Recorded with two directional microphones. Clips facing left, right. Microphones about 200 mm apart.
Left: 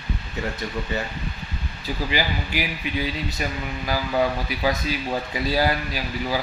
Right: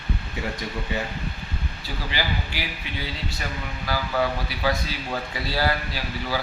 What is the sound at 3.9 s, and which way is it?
Speech, 20° left (ahead or behind).